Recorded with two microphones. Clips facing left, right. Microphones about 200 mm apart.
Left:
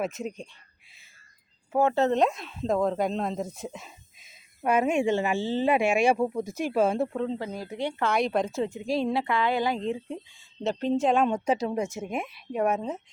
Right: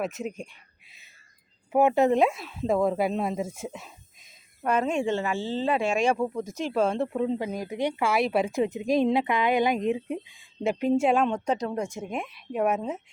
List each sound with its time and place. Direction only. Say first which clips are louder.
0.0 s speech: even; centre (ahead or behind)
0.5 s a sound: right 2 dB; 20° right (ahead or behind)
1.7 s speech: right 2 dB; 15° right (ahead or behind); by 7.1 s 5° left (ahead or behind)
7.1 s speech: right 3 dB; 10° right (ahead or behind)
11.3 s speech: left 1 dB; 5° left (ahead or behind)